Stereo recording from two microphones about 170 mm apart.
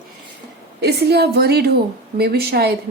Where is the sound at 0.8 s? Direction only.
70° right (ahead or behind).